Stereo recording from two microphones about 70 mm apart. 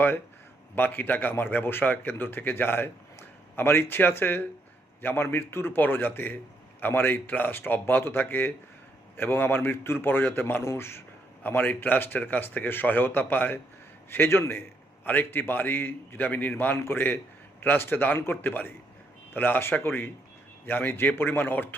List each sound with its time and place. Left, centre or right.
0.8 s a man's voice: left